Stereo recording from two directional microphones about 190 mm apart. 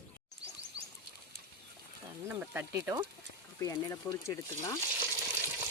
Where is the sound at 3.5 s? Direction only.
15° left (ahead or behind).